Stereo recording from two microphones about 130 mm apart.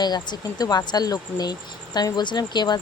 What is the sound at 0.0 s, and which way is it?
Speech, 35° left (ahead or behind).